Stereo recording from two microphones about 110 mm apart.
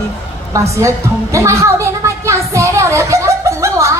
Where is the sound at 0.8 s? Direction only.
30° right (ahead or behind).